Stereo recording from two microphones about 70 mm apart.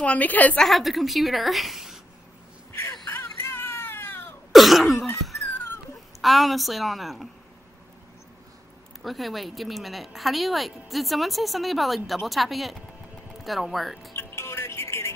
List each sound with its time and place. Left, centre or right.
0.0 s a woman's voice: left
0.6 s speech: centre
3.1 s baby cry: left
4.5 s throat clearing: centre
6.2 s speech: centre
9.0 s speech: centre
14.1 s music: left